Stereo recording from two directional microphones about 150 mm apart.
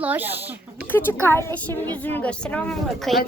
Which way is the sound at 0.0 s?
10° right (ahead or behind).